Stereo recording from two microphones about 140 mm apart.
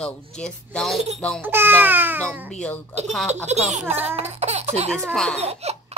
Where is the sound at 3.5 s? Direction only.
55° right (ahead or behind).